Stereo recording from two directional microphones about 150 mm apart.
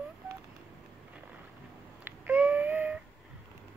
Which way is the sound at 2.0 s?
10° right (ahead or behind).